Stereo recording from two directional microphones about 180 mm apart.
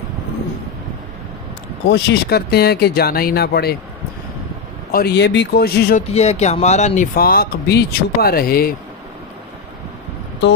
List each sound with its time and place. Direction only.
1.9 s speech: 65° left (ahead or behind)
4.9 s speech: 65° left (ahead or behind)
6.1 s speech: 35° left (ahead or behind)
7.2 s speech: 55° left (ahead or behind)